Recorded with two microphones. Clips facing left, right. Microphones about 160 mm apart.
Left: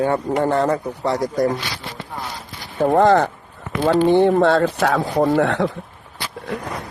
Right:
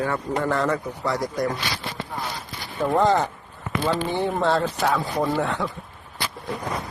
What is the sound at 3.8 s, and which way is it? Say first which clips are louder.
Speech: left 10 dB; 75° left (ahead or behind).